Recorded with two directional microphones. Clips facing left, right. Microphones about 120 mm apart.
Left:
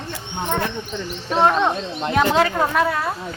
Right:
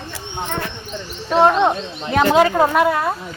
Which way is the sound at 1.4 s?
20° right (ahead or behind).